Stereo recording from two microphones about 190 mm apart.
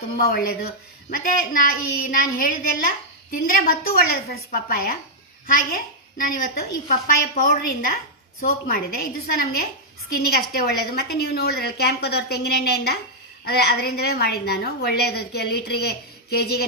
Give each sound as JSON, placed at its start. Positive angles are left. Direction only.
{"t": 0.2, "sound": "a woman's voice", "side_deg": 50}